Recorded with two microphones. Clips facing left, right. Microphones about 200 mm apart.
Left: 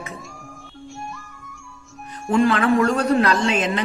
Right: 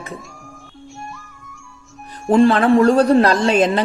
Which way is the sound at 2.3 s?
35° right (ahead or behind).